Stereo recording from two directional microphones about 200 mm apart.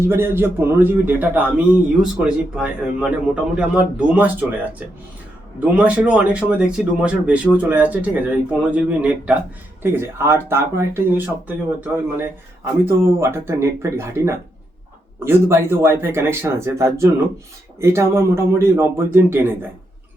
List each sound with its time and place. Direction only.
0.0 s speech: 10° right (ahead or behind)
5.5 s speech: 5° right (ahead or behind)